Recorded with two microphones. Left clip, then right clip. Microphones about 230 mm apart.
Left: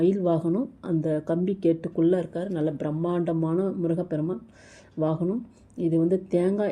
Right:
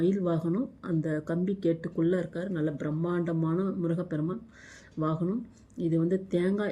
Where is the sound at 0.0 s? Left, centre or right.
Centre.